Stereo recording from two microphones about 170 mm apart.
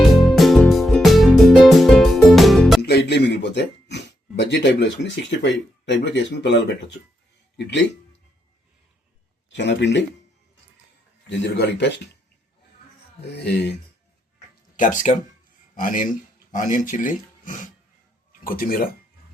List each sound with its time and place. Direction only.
0.0 s music: centre (ahead or behind)
2.8 s speech: 80° left
9.5 s speech: 90° left
11.3 s speech: 90° left
13.3 s speech: 80° left
14.8 s speech: 50° left (ahead or behind)